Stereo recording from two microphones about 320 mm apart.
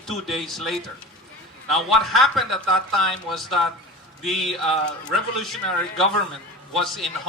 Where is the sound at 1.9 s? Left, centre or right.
Centre.